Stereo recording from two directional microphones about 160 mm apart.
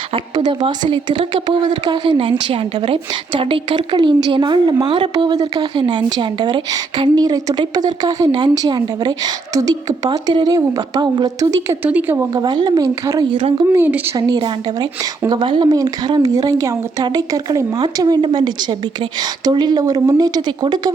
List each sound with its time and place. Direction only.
0.1 s a woman's voice: 30° right (ahead or behind)
11.8 s a woman's voice: 10° right (ahead or behind)
13.3 s speech: 35° right (ahead or behind)
13.7 s speech: 10° right (ahead or behind)
14.2 s a woman's voice: 25° right (ahead or behind)